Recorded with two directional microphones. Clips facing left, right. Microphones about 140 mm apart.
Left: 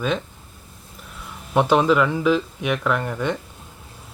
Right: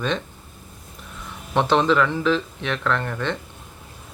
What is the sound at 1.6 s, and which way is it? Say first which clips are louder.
Speech: left 2 dB; 10° left (ahead or behind).